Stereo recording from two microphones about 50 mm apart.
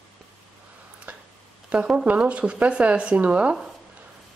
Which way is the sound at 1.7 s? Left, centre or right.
Right.